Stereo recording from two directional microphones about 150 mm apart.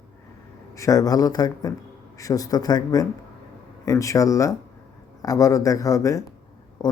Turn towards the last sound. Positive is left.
turn(degrees=25)  # may be behind; listen again after turning